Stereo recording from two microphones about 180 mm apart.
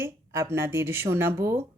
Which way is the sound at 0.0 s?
15° right (ahead or behind).